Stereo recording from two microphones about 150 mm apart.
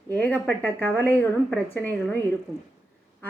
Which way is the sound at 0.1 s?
10° left (ahead or behind).